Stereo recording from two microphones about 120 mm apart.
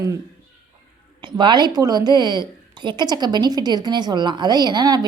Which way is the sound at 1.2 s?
40° right (ahead or behind).